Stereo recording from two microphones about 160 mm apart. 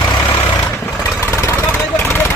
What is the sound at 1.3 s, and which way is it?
Vehicle, 15° left (ahead or behind).